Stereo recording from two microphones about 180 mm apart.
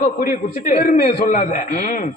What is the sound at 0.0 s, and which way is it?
A man's voice, 50° left (ahead or behind).